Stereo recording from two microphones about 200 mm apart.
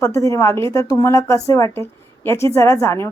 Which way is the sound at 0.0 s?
15° left (ahead or behind).